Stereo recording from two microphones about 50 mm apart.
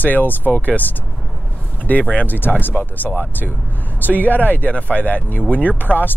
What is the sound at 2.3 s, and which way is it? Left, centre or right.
Speech, left.